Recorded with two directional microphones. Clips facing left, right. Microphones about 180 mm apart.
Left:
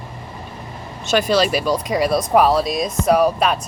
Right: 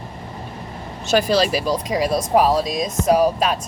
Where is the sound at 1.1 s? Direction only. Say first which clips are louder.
Even; 35° right (ahead or behind).